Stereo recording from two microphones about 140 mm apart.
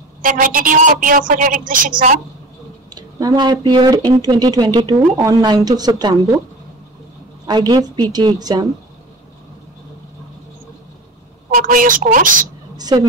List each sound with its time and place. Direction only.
0.2 s a woman's voice: 80° right
2.9 s speech: 30° right (ahead or behind)
7.4 s speech: 30° right (ahead or behind)
11.5 s a woman's voice: 75° right (ahead or behind)
12.7 s a sound: 30° right (ahead or behind)